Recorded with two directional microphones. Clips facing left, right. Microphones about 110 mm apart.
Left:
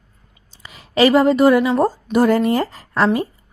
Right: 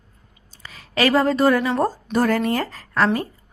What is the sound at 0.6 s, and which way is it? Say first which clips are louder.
A woman's voice: left 6 dB; 20° left (ahead or behind).